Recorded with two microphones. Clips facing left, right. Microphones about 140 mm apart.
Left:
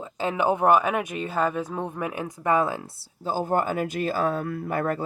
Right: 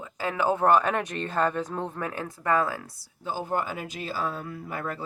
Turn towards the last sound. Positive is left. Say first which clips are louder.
# left 7 dB
turn(degrees=50)  # may be behind; listen again after turning